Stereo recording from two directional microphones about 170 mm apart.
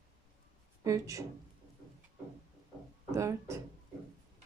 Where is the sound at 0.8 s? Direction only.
20° right (ahead or behind).